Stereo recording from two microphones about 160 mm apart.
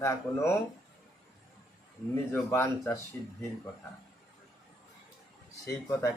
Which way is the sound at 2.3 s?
15° left (ahead or behind).